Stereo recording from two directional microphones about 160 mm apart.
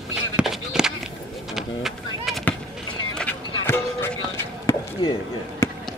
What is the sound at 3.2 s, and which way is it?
Music, 10° left (ahead or behind).